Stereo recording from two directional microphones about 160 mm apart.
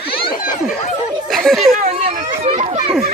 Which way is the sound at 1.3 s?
Centre (ahead or behind).